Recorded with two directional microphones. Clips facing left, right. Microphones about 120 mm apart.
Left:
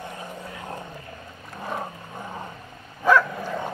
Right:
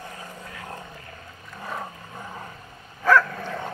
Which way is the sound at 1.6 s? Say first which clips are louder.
Left 3 dB; 20° left (ahead or behind).